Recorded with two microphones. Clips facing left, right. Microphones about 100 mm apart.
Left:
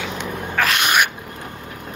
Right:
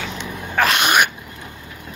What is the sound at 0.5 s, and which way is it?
Dog, centre (ahead or behind).